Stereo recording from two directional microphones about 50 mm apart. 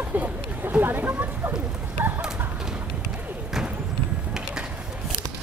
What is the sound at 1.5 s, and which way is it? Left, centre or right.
Rain, right.